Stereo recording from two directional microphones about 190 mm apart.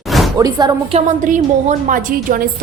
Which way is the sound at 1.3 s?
45° right (ahead or behind).